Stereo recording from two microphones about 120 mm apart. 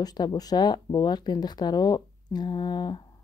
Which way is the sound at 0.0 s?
35° left (ahead or behind).